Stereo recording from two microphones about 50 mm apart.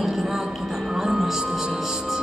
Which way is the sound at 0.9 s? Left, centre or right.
Centre.